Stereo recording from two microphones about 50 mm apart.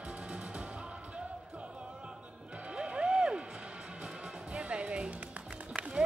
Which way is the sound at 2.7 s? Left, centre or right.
Centre.